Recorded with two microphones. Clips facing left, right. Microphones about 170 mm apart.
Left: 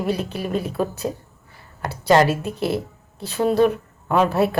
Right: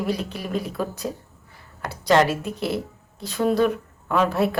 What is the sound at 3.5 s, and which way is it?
Speech, 35° left (ahead or behind).